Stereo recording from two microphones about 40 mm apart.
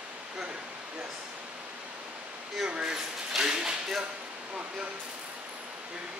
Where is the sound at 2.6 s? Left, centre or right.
Right.